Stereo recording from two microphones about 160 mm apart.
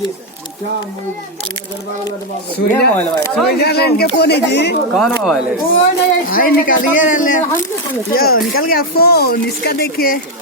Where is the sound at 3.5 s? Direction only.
80° left.